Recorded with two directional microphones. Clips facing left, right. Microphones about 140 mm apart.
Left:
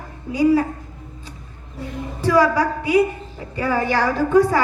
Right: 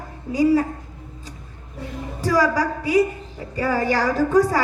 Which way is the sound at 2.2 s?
40° right (ahead or behind).